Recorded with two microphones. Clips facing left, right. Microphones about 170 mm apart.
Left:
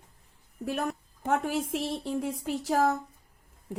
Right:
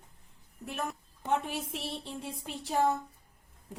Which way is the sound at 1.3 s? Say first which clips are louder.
Left 4 dB; 80° left.